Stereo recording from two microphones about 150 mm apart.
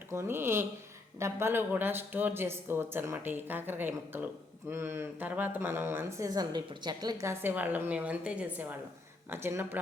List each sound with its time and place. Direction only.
0.1 s speech: 15° right (ahead or behind)